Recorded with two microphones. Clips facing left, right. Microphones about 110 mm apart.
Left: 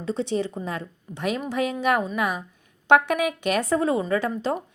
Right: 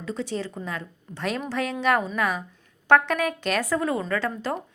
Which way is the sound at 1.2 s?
10° left (ahead or behind).